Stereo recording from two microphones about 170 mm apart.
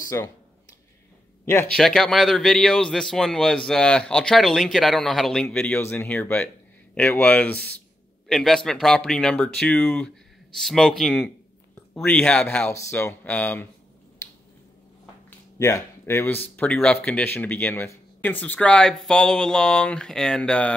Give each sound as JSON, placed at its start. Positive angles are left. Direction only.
{"t": 0.1, "sound": "speech", "side_deg": 15}
{"t": 1.4, "sound": "speech", "side_deg": 15}
{"t": 1.8, "sound": "a man's voice", "side_deg": 0}
{"t": 15.2, "sound": "speech", "side_deg": 15}